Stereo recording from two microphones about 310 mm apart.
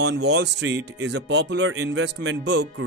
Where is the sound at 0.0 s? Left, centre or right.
Right.